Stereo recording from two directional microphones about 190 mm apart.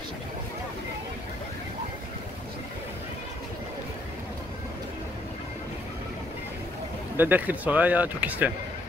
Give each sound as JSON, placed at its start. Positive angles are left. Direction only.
{"t": 7.2, "sound": "speech", "side_deg": -10}